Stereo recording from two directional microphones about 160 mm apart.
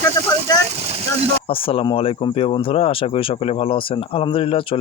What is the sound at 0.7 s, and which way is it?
Speech, 40° right (ahead or behind).